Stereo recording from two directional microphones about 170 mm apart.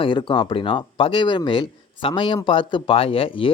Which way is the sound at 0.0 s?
30° left (ahead or behind).